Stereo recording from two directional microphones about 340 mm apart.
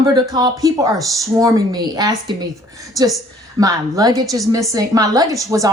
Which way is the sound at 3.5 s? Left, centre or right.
Centre.